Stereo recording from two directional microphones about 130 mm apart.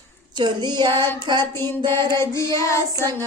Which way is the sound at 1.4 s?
20° left (ahead or behind).